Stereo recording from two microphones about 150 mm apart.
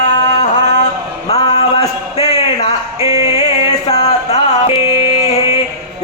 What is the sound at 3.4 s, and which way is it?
Music, 45° left (ahead or behind).